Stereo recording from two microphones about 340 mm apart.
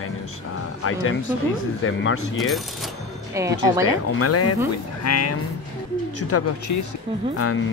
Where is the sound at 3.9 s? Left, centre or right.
Left.